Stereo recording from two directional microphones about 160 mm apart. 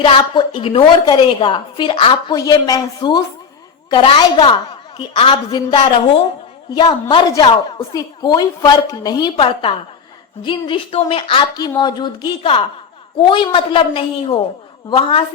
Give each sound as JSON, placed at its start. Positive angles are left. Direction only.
{"t": 0.0, "sound": "a woman's voice", "side_deg": 30}
{"t": 2.3, "sound": "a woman's voice", "side_deg": 25}
{"t": 9.3, "sound": "a woman's voice", "side_deg": 35}